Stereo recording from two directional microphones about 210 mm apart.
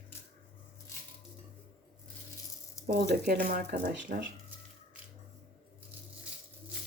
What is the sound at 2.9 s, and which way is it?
Speech, 50° right (ahead or behind).